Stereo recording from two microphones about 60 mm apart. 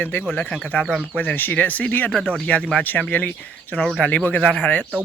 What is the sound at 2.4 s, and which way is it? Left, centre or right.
Speech, left.